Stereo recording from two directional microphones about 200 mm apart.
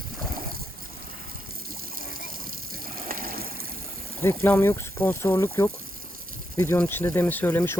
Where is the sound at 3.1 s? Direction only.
45° right (ahead or behind).